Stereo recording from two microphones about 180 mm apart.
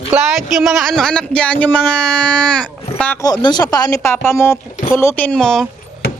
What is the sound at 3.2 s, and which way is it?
Speech, 25° left (ahead or behind).